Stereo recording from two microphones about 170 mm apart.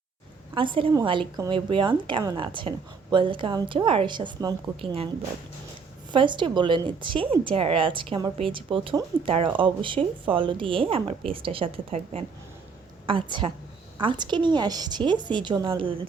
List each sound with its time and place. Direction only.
0.5 s a woman's voice: 30° right (ahead or behind)
6.1 s a woman's voice: 30° right (ahead or behind)